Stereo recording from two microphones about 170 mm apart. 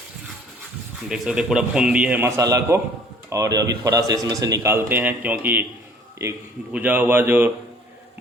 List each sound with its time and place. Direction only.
1.0 s a man's voice: 5° right (ahead or behind)
6.7 s a man's voice: 10° right (ahead or behind)